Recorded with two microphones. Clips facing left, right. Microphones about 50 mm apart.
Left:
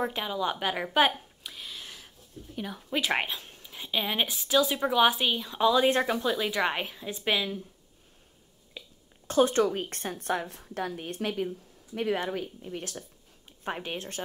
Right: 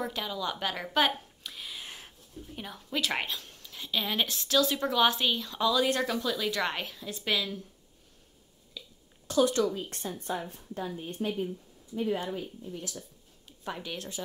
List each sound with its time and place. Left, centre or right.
0.0 s a woman's voice: left
1.4 s a sound: centre
1.9 s a sound: right
2.5 s speech: centre
2.9 s a woman's voice: left
8.8 s a sound: left
9.3 s speech: left
9.7 s a woman's voice: left
13.7 s speech: left